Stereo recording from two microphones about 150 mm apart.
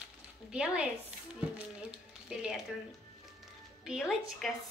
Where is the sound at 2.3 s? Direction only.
5° right (ahead or behind).